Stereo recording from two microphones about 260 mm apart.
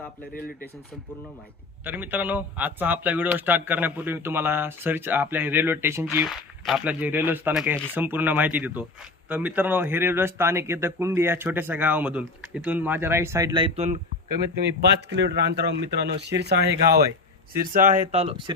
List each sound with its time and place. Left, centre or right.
1.8 s speech: centre; by 14.0 s right
14.5 s speech: right